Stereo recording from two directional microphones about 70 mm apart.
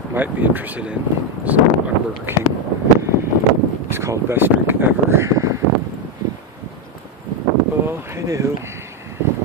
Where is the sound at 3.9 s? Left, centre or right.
Right.